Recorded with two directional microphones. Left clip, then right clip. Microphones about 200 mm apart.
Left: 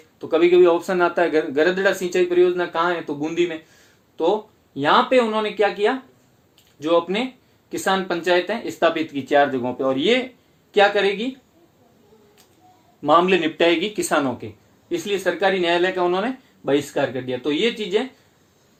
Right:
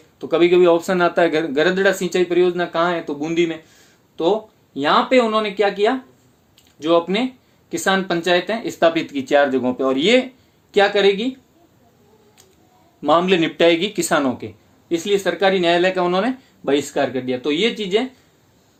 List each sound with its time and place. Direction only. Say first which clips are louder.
0.2 s speech: right 1 dB; 40° right (ahead or behind)
13.0 s speech: even; 45° right (ahead or behind)